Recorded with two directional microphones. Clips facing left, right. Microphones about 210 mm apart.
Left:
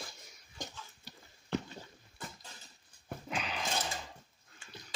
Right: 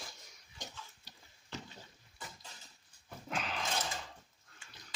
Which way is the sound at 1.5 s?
55° left (ahead or behind).